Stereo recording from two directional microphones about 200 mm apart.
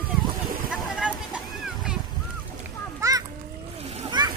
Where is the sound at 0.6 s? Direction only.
5° right (ahead or behind).